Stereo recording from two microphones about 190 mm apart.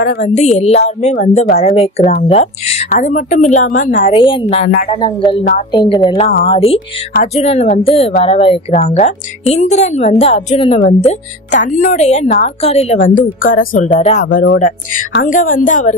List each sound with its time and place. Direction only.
0.0 s a woman's voice: 45° left (ahead or behind)
1.7 s a woman's voice: 30° left (ahead or behind)
4.2 s a woman's voice: 25° left (ahead or behind); by 16.0 s 40° left (ahead or behind)